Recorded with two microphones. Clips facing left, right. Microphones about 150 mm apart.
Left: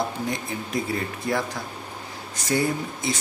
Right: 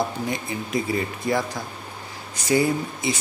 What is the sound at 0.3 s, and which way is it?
Speech, centre (ahead or behind).